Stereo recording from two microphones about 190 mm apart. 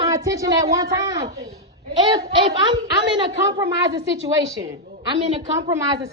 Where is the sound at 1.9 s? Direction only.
25° right (ahead or behind).